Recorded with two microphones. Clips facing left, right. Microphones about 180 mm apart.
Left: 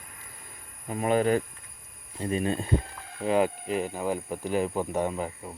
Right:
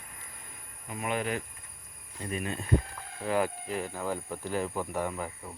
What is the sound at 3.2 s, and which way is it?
Speech, 20° left (ahead or behind).